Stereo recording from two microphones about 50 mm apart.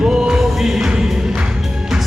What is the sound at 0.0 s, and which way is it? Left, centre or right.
Music, centre.